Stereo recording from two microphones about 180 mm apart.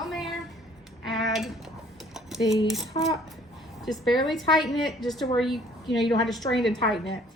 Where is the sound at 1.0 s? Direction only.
Centre (ahead or behind).